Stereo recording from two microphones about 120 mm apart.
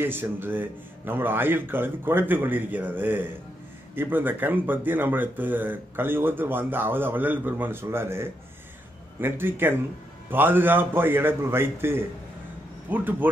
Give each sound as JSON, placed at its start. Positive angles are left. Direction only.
{"t": 0.0, "sound": "speech", "side_deg": -15}